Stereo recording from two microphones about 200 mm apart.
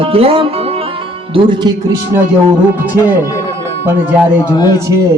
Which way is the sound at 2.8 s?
10° right (ahead or behind).